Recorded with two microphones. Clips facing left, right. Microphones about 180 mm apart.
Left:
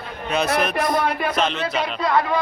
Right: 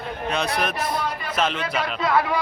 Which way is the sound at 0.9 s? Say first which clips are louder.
Left 5 dB; 85° left.